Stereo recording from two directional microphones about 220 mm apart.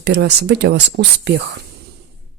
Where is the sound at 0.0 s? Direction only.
50° right (ahead or behind).